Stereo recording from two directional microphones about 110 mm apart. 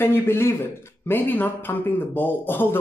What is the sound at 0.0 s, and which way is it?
Speech, 20° left (ahead or behind).